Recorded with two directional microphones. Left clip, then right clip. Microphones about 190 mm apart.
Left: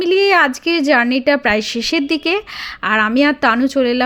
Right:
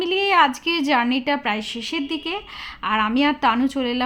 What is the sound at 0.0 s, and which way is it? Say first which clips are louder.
Speech: left 5 dB; 30° left (ahead or behind).